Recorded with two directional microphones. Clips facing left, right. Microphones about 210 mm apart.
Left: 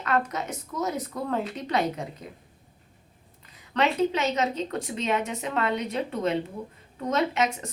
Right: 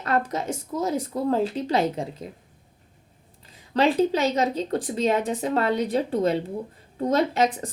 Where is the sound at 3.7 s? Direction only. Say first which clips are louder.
Right 4 dB; 30° right (ahead or behind).